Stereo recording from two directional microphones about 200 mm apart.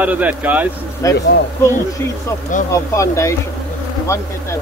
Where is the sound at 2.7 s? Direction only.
15° left (ahead or behind).